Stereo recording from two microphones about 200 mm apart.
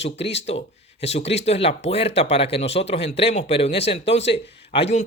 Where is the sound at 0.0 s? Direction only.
30° left (ahead or behind).